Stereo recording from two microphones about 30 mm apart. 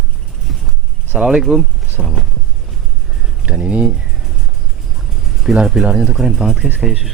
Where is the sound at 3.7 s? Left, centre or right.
Right.